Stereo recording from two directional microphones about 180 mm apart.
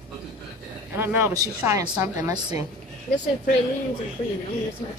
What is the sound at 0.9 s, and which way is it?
A woman's voice, 10° right (ahead or behind).